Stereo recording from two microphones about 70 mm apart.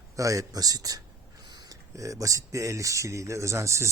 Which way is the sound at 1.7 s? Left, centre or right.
Right.